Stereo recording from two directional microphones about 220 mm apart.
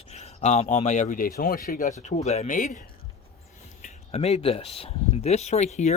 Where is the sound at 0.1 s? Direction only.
30° left (ahead or behind).